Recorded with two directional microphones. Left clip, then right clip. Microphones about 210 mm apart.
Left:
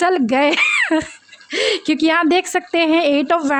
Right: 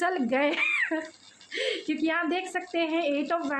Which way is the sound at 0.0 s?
45° left (ahead or behind).